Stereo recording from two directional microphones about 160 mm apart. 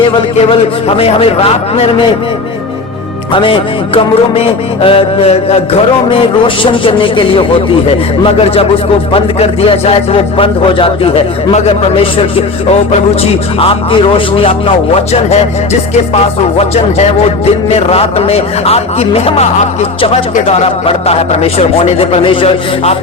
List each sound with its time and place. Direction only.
0.9 s music: 35° left (ahead or behind)
3.3 s music: 30° left (ahead or behind)
13.6 s music: 35° left (ahead or behind)